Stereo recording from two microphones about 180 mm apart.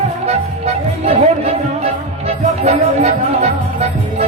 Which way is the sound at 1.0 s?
35° right (ahead or behind).